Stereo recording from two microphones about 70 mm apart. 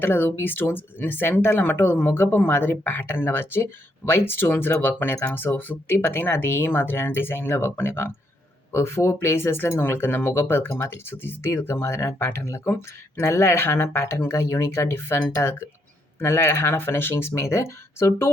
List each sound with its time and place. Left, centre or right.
0.0 s speech: left
14.9 s speech: left
16.2 s speech: left